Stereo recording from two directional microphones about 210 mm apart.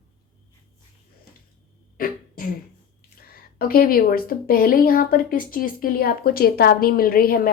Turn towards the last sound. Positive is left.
turn(degrees=45)  # may be behind; listen again after turning